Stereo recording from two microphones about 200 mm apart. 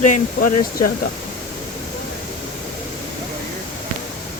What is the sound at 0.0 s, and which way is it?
Speech, 40° left (ahead or behind).